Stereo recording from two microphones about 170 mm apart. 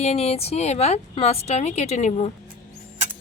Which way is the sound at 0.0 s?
40° left (ahead or behind).